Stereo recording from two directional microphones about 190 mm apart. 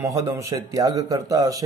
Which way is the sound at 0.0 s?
15° right (ahead or behind).